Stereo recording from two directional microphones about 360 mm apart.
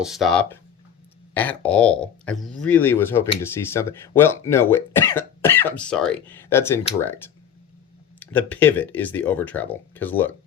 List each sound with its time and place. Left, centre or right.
0.0 s speech: centre